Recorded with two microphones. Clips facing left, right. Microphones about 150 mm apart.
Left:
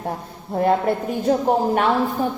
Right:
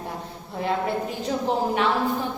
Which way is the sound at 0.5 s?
50° left (ahead or behind).